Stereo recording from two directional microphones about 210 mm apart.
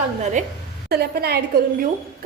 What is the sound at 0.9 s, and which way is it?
Speech, 50° right (ahead or behind).